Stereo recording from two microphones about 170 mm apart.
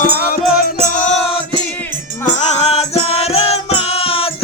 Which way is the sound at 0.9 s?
45° left (ahead or behind).